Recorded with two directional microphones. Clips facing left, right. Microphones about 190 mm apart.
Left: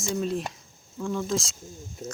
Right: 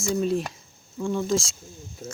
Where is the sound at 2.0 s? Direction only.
20° left (ahead or behind).